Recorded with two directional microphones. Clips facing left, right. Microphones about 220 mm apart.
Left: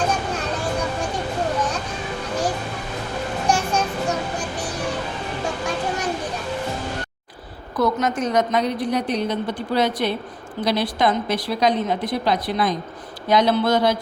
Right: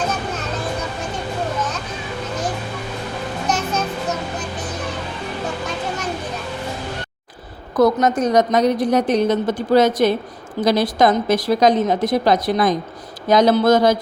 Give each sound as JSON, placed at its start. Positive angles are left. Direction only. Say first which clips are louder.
{"t": 7.8, "sound": "a woman's voice", "louder": "right 6 dB", "side_deg": -40}